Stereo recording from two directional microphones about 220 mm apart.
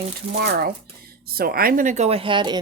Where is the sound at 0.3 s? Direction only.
45° right (ahead or behind).